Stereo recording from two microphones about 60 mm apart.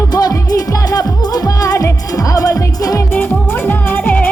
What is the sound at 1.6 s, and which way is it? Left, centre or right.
Music, left.